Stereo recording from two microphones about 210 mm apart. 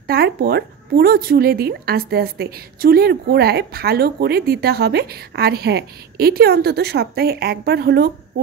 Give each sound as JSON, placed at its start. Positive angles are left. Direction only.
{"t": 0.0, "sound": "a woman's voice", "side_deg": -50}